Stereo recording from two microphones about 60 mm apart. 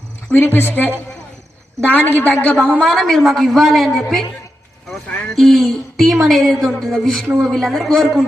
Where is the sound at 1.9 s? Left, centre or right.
Left.